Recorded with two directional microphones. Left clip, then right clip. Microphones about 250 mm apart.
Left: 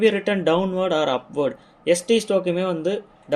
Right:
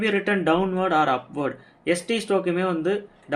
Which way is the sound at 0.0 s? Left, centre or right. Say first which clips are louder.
Left 3 dB; left.